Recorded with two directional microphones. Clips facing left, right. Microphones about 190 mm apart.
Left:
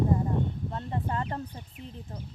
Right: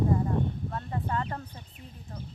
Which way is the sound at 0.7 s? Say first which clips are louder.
Left 1 dB; 25° left (ahead or behind).